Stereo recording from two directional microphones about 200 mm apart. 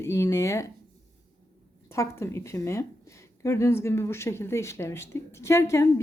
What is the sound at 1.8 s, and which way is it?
A woman's voice, 15° left (ahead or behind).